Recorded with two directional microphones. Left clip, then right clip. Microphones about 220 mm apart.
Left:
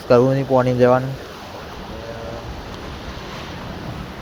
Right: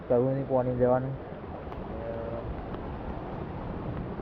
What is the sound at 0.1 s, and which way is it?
Speech, 30° left (ahead or behind).